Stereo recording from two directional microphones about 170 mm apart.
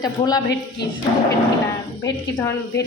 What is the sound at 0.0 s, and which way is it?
Speech, 20° left (ahead or behind).